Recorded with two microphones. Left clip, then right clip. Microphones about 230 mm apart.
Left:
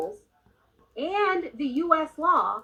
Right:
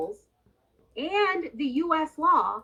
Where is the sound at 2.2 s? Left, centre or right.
Right.